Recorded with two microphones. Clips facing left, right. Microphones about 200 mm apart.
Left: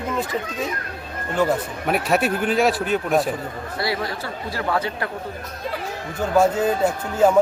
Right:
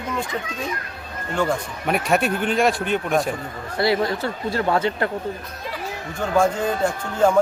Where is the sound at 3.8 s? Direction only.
25° right (ahead or behind).